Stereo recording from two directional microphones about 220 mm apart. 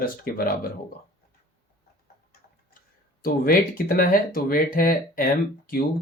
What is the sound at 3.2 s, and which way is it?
Speech, 40° left (ahead or behind).